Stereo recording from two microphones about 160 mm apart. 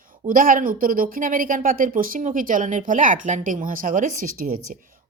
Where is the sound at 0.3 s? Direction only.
60° right (ahead or behind).